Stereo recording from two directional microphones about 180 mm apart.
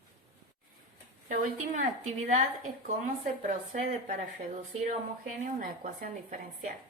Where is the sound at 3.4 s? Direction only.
45° right (ahead or behind).